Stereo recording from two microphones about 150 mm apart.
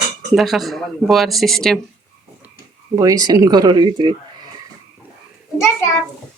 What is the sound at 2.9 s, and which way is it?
Speech, 25° right (ahead or behind).